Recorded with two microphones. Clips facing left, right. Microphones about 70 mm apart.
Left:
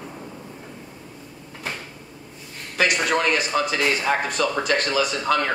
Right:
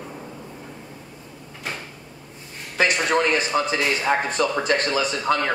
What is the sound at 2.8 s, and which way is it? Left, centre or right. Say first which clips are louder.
Speech: right 1 dB; right.